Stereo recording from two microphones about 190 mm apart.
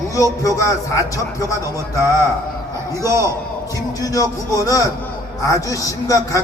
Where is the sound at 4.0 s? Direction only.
20° left (ahead or behind).